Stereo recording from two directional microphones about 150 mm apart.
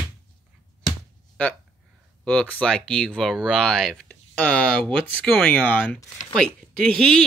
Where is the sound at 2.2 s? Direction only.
5° left (ahead or behind).